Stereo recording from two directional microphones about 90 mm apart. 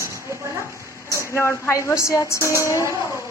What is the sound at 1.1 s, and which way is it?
A woman's voice, 30° left (ahead or behind).